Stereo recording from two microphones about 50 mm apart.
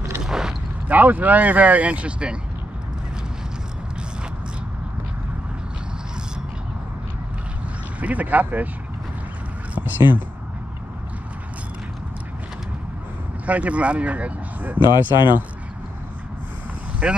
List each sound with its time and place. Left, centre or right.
0.2 s mechanisms: centre
0.8 s speech: right
8.0 s speech: right
9.8 s speech: right
13.5 s speech: right
17.0 s speech: right